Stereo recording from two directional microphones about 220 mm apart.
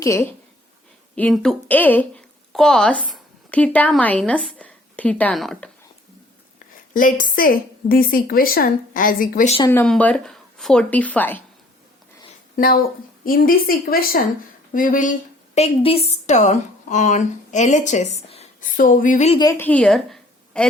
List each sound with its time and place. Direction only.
0.0 s speech: 10° left (ahead or behind)
6.9 s a woman's voice: 40° left (ahead or behind)
9.6 s speech: 5° left (ahead or behind)
12.5 s a woman's voice: 40° left (ahead or behind)
19.4 s a woman's voice: 15° left (ahead or behind)